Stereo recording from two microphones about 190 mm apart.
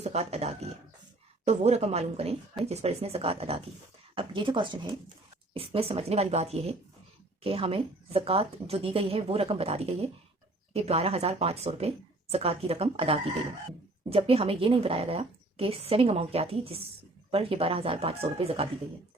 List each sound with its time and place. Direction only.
0.0 s a woman's voice: 35° right (ahead or behind)